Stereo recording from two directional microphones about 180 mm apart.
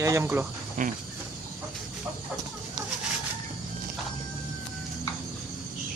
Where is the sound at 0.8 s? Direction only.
45° right (ahead or behind).